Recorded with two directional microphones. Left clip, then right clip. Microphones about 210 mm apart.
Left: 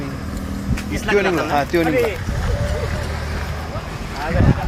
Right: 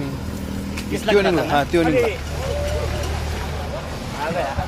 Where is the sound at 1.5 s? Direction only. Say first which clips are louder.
Even; 15° right (ahead or behind).